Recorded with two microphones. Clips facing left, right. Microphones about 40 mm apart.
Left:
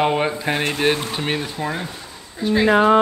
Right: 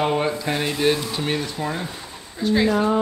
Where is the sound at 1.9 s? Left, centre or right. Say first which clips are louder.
Even; centre.